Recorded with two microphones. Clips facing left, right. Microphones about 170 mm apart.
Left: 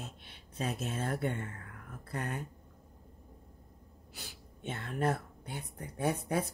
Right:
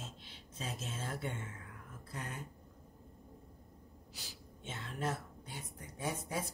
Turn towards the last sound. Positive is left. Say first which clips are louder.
# left 7 dB
turn(degrees=60)  # may be behind; listen again after turning